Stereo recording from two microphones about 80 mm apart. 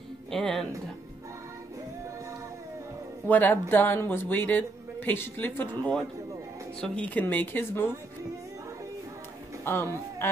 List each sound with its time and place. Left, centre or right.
0.3 s speech: centre
3.3 s speech: left
9.7 s a man's voice: left